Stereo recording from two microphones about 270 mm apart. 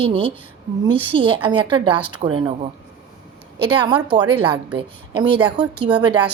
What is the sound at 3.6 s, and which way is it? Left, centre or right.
A woman's voice, centre.